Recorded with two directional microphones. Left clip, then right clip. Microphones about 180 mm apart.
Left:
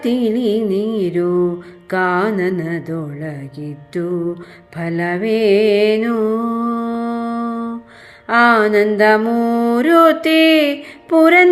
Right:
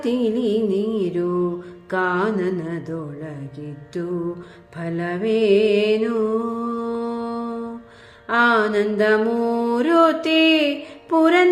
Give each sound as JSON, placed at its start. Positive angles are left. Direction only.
{"t": 0.0, "sound": "music", "side_deg": 25}
{"t": 4.8, "sound": "music", "side_deg": 25}